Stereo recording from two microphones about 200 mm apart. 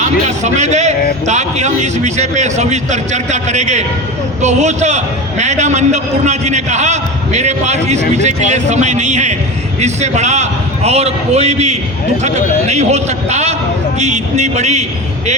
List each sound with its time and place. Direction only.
0.0 s a man's voice: 35° right (ahead or behind)